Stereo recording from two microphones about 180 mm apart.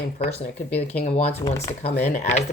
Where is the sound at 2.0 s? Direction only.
40° left (ahead or behind).